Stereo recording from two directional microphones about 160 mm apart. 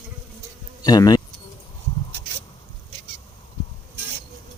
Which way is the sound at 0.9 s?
25° left (ahead or behind).